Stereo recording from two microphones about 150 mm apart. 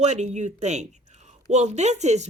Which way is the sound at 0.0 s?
50° right (ahead or behind).